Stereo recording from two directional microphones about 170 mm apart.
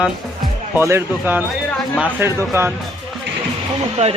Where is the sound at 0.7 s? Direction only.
15° right (ahead or behind).